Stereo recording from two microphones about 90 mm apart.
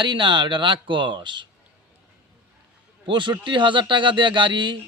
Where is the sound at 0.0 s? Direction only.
65° right (ahead or behind).